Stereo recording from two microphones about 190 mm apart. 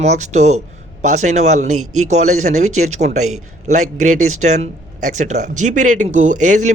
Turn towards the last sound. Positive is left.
turn(degrees=-40)  # may be behind; listen again after turning